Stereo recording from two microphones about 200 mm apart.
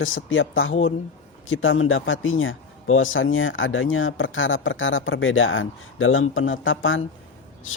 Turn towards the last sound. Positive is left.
turn(degrees=85)